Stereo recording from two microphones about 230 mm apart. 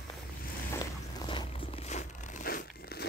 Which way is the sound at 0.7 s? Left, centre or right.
Centre.